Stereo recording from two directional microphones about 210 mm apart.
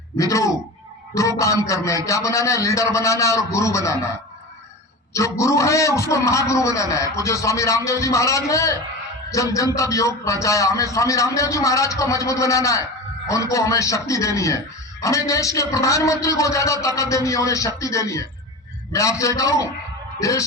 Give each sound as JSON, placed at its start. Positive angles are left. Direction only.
{"t": 0.2, "sound": "a man's voice", "side_deg": 15}
{"t": 5.1, "sound": "a man's voice", "side_deg": 15}